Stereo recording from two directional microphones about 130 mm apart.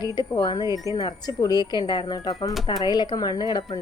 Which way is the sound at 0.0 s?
30° left (ahead or behind).